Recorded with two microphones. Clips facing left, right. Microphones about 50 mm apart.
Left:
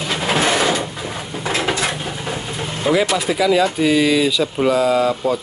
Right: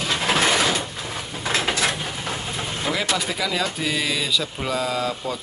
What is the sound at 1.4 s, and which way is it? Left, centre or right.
Dishes, left.